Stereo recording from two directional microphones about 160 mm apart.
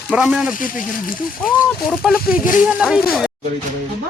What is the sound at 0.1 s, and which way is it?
Speech, 5° right (ahead or behind).